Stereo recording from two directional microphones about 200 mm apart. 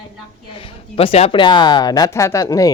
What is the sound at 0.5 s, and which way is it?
A woman's voice, 25° left (ahead or behind).